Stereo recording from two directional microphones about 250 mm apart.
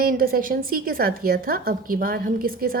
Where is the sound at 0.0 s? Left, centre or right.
Right.